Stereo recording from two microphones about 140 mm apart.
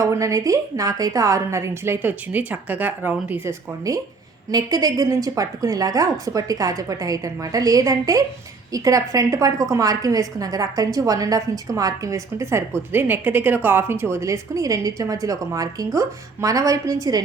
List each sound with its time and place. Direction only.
0.0 s a woman's voice: 25° right (ahead or behind)
3.9 s a woman's voice: 25° right (ahead or behind)